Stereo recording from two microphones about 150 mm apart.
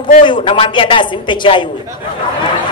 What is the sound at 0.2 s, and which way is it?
A man's voice, 35° left (ahead or behind).